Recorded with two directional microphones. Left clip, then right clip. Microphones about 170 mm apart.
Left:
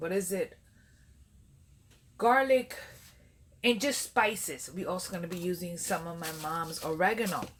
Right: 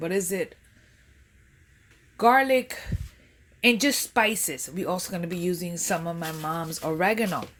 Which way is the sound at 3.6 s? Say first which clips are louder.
Right 7 dB; 60° right (ahead or behind).